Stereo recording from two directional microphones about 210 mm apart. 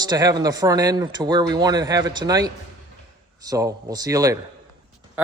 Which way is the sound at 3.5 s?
15° right (ahead or behind).